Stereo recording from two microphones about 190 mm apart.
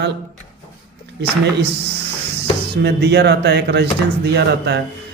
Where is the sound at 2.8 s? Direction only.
60° right (ahead or behind).